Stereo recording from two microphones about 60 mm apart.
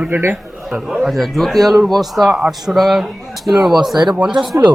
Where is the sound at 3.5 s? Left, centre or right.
Centre.